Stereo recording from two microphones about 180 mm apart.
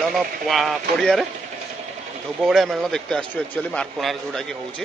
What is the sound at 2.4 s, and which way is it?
Speech, centre (ahead or behind).